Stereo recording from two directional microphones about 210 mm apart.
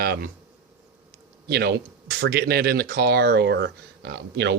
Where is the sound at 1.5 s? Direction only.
50° right (ahead or behind).